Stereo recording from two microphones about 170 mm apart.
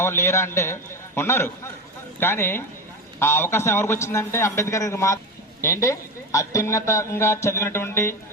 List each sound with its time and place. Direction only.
0.0 s speech: 15° left (ahead or behind)